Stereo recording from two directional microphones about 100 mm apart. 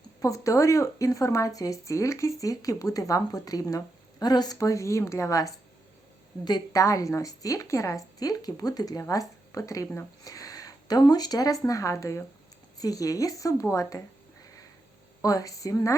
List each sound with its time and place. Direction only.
0.2 s speech: 35° left (ahead or behind)
10.2 s speech: 35° left (ahead or behind)
15.2 s speech: 35° left (ahead or behind)